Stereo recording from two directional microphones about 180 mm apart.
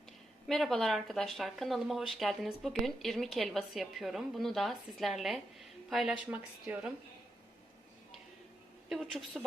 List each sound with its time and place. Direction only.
0.4 s speech: centre (ahead or behind)
8.9 s speech: centre (ahead or behind)